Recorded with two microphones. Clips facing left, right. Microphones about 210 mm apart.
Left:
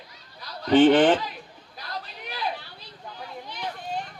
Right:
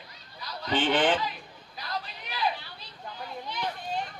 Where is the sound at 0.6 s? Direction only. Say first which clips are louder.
Left 10 dB; 50° left (ahead or behind).